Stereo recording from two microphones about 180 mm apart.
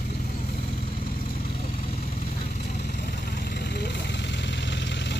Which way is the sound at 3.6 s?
65° left (ahead or behind).